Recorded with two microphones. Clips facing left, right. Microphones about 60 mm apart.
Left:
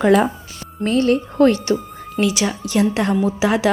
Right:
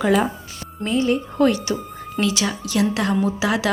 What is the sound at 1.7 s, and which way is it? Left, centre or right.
A woman's voice, centre.